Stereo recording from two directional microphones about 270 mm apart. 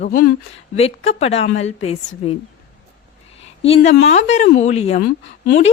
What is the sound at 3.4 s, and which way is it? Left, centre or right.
A woman's voice, left.